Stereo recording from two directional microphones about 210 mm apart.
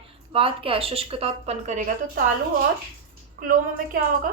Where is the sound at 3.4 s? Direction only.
45° right (ahead or behind).